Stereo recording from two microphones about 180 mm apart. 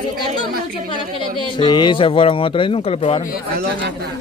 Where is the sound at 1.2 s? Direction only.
25° left (ahead or behind).